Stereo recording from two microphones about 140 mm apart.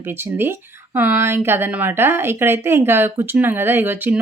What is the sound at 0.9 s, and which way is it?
A woman's voice, 15° right (ahead or behind).